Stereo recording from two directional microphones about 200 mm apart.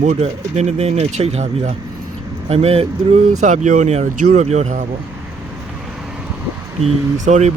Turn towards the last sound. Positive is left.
turn(degrees=-35)  # may be behind; listen again after turning